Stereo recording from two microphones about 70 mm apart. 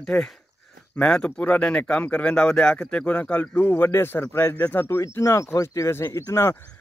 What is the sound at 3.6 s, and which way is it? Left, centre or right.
Speech, left.